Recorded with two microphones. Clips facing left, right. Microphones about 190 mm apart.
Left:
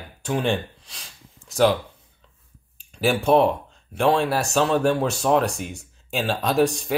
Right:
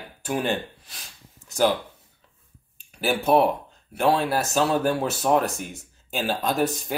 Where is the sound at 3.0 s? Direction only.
5° right (ahead or behind).